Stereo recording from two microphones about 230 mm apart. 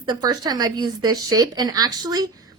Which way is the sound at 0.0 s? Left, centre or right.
Centre.